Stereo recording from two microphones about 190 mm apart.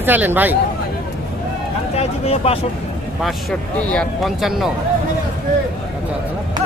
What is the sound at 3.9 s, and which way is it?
Speech, centre (ahead or behind).